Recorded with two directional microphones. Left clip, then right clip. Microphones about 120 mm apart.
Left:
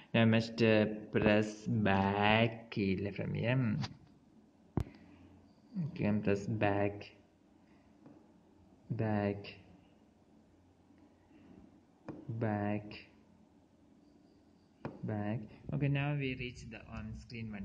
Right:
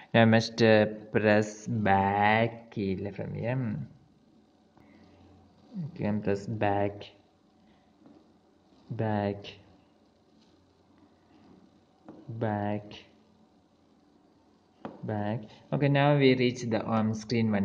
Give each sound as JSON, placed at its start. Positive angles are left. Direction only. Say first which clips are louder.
{"t": 0.0, "sound": "speech", "louder": "right 8 dB", "side_deg": -80}
{"t": 5.9, "sound": "speech", "louder": "right 4 dB", "side_deg": -40}
{"t": 8.9, "sound": "speech", "louder": "right 5 dB", "side_deg": -55}
{"t": 12.4, "sound": "speech", "louder": "right 6 dB", "side_deg": -55}
{"t": 15.0, "sound": "speech", "louder": "right 8 dB", "side_deg": -60}